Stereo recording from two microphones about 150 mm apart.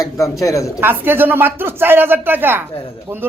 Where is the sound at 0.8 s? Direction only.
15° right (ahead or behind).